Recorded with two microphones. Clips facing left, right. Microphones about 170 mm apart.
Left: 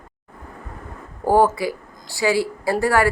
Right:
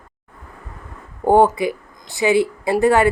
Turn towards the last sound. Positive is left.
turn(degrees=-20)  # may be behind; listen again after turning